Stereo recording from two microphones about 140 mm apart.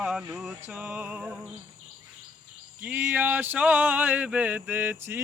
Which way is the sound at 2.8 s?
10° right (ahead or behind).